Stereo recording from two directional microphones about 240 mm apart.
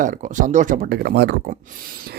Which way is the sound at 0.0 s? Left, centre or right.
Right.